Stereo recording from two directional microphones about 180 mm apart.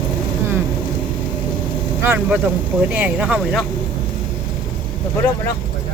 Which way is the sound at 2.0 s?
15° right (ahead or behind).